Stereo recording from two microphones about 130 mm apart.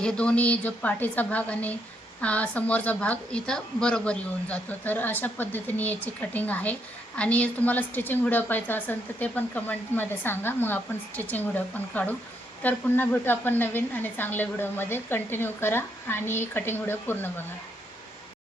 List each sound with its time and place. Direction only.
0.0 s a woman's voice: 10° left (ahead or behind)